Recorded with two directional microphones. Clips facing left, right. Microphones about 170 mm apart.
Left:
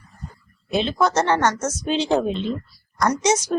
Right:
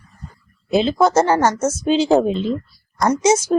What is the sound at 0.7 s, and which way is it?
A woman's voice, 25° right (ahead or behind).